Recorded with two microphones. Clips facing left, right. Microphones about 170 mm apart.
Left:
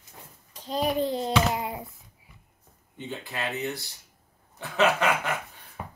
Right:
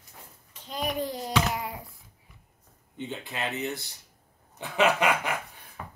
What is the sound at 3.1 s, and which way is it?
Speech, 20° right (ahead or behind).